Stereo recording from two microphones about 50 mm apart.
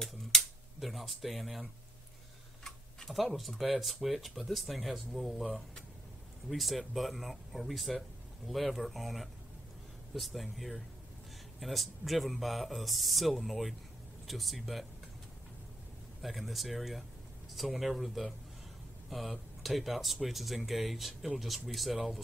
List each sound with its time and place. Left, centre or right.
0.0 s a sound: centre
3.1 s speech: centre
16.2 s speech: centre